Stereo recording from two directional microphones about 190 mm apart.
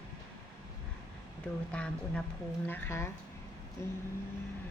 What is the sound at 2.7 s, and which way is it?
A woman's voice, 15° left (ahead or behind).